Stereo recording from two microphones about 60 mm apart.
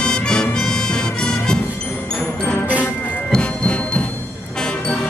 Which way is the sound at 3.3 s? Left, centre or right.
Centre.